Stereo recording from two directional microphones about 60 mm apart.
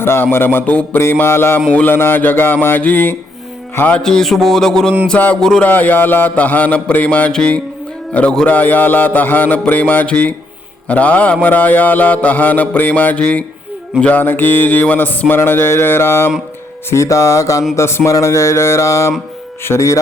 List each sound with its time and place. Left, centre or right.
0.0 s a sound: left
0.6 s mantra: left
1.2 s a sound: left
3.9 s mantra: centre
5.1 s mantra: left
5.4 s mantra: centre
5.6 s mantra: left
14.0 s a sound: left
15.4 s a sound: left
16.9 s mantra: left
17.7 s speech: left
18.1 s mantra: left
19.6 s speech: left